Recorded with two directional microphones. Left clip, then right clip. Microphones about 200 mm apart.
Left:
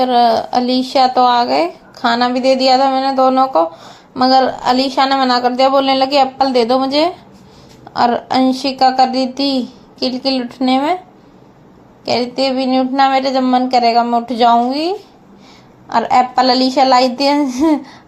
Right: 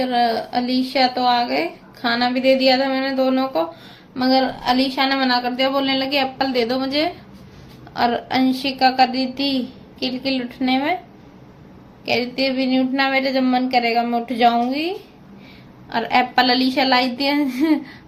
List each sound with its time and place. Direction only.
0.0 s a woman's voice: 30° left (ahead or behind)
12.0 s a woman's voice: 30° left (ahead or behind)